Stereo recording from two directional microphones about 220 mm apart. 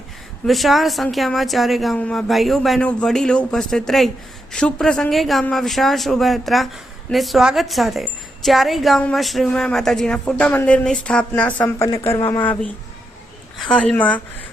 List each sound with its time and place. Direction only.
0.4 s a woman's voice: centre (ahead or behind)
13.6 s a woman's voice: 5° left (ahead or behind)